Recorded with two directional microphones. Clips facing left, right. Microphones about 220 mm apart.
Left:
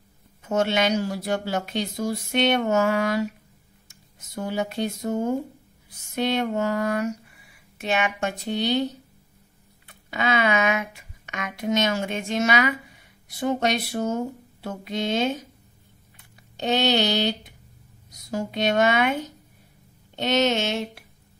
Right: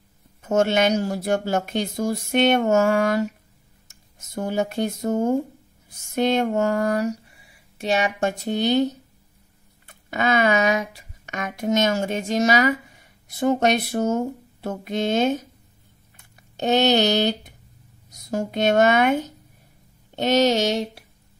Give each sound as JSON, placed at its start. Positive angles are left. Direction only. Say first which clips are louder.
{"t": 0.4, "sound": "a woman's voice", "louder": "right 3 dB", "side_deg": -45}
{"t": 4.4, "sound": "a woman's voice", "louder": "right 3 dB", "side_deg": -50}
{"t": 10.1, "sound": "a woman's voice", "louder": "right 3 dB", "side_deg": -45}
{"t": 20.2, "sound": "speech", "louder": "right 4 dB", "side_deg": -40}